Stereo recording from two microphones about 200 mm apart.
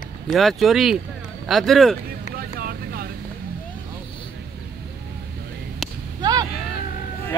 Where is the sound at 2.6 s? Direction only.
50° right (ahead or behind).